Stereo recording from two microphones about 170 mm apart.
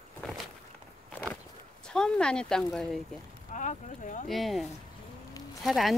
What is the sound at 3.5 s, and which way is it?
Speech, 45° left (ahead or behind).